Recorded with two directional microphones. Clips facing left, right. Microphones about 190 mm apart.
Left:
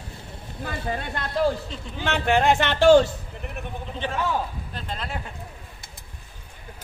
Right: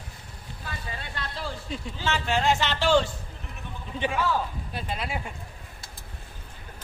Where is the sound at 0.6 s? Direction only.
50° left (ahead or behind).